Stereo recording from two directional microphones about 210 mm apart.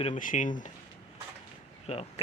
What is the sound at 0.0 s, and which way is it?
Speech, 40° left (ahead or behind).